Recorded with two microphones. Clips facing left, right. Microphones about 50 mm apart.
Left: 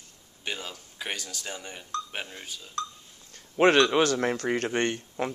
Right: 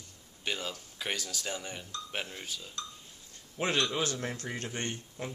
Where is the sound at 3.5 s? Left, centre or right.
Left.